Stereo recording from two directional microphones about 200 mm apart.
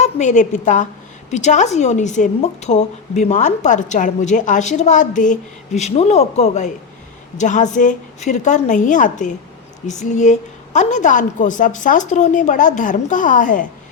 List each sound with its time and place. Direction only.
0.0 s a woman's voice: 35° left (ahead or behind)